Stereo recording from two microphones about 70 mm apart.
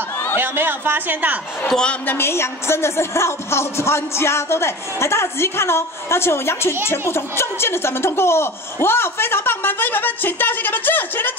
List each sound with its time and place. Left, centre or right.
0.4 s a man's voice: right
1.7 s a woman's voice: centre
2.0 s a woman's voice: left